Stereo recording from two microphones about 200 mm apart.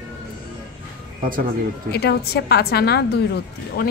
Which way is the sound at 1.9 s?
55° left (ahead or behind).